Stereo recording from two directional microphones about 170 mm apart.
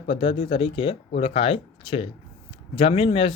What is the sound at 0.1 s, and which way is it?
Speech, 35° left (ahead or behind).